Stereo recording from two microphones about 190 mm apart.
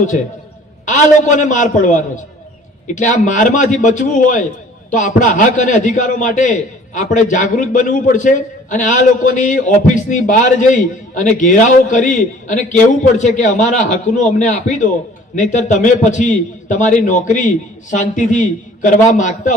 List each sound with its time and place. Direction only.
0.9 s a man's voice: 40° left (ahead or behind)